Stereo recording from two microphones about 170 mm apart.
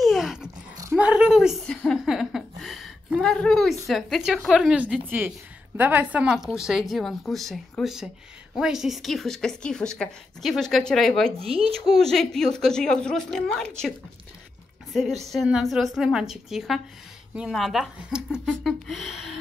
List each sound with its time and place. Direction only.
0.0 s a sound: centre (ahead or behind)
0.9 s a woman's voice: 5° right (ahead or behind)
1.8 s a sound: centre (ahead or behind)
3.8 s a woman's voice: centre (ahead or behind)
11.3 s speech: 35° right (ahead or behind)
12.0 s a woman's voice: 5° left (ahead or behind)